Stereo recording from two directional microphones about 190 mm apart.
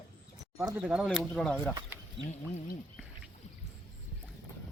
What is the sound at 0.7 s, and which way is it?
A man's voice, 5° right (ahead or behind).